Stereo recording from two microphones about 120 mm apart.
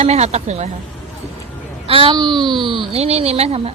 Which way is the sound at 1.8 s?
50° right (ahead or behind).